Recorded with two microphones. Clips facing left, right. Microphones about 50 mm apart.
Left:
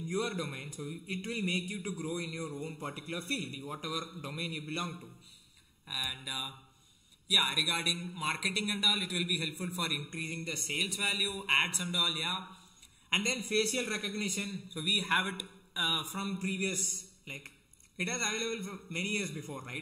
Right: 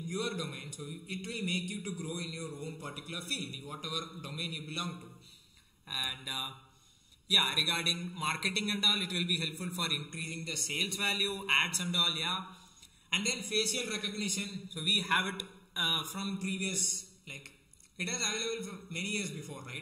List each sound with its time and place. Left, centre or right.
0.0 s a man's voice: left
5.9 s a man's voice: centre; by 10.7 s left
10.7 s a man's voice: centre
13.1 s a man's voice: left; by 16.2 s centre
16.2 s a man's voice: left